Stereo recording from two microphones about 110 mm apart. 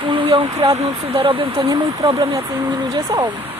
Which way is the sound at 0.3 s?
45° right (ahead or behind).